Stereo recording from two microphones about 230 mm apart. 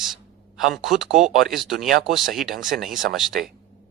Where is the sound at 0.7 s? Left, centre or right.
Centre.